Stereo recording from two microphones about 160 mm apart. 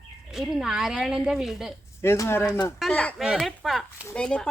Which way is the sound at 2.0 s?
15° left (ahead or behind).